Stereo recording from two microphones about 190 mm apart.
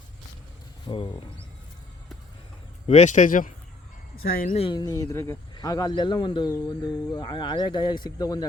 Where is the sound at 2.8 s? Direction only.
35° left (ahead or behind).